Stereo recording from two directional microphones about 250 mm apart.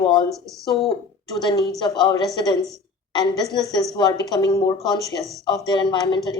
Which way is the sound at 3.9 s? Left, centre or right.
Centre.